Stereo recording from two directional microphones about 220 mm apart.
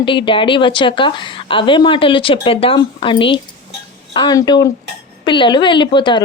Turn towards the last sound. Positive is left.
turn(degrees=20)  # may be behind; listen again after turning